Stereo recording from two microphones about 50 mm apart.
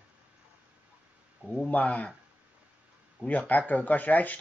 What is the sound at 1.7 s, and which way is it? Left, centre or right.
Speech, left.